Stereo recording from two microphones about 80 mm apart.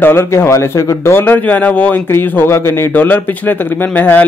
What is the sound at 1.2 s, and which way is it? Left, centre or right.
Speech, left.